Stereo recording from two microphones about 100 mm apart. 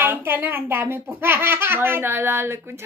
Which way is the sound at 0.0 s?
20° right (ahead or behind).